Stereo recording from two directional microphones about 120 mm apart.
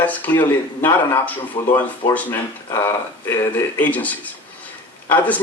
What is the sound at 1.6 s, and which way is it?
Speech, 35° left (ahead or behind).